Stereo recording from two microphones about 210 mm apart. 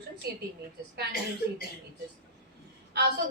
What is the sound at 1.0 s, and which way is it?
Speech, 50° right (ahead or behind).